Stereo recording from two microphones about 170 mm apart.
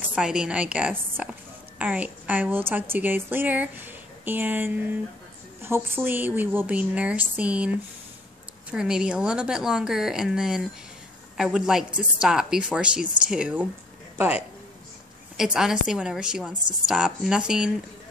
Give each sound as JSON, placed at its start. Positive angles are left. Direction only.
{"t": 0.1, "sound": "a woman's voice", "side_deg": -5}